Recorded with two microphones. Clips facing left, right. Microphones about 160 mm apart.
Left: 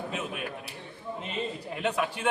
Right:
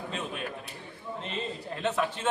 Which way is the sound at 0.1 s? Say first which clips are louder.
Left 1 dB; 10° left (ahead or behind).